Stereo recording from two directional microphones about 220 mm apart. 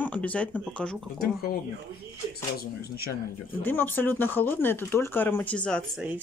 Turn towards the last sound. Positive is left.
turn(degrees=5)  # may be behind; listen again after turning